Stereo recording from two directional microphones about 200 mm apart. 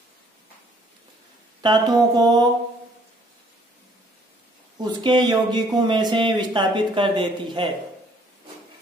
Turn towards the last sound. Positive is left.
turn(degrees=-25)  # may be behind; listen again after turning